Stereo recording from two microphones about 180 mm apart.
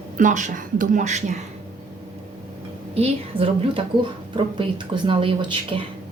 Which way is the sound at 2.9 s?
35° right (ahead or behind).